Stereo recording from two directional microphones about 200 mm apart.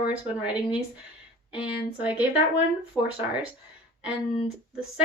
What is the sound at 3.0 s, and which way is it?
Speech, 15° left (ahead or behind).